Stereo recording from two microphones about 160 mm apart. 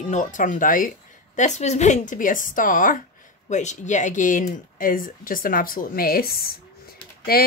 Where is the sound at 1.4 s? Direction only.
45° left (ahead or behind).